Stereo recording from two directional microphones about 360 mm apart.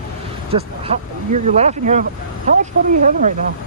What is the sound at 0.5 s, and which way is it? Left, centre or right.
Speech, centre.